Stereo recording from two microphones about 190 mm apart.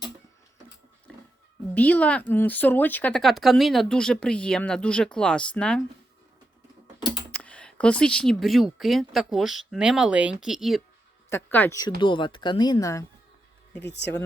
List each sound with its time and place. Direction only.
1.7 s speech: 10° left (ahead or behind)
7.3 s speech: 5° left (ahead or behind)
11.3 s speech: 10° left (ahead or behind)
11.9 s speech: 25° left (ahead or behind)
13.8 s speech: 65° left (ahead or behind)